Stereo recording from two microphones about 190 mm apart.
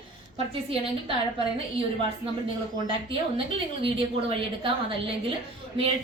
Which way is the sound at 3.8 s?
30° right (ahead or behind).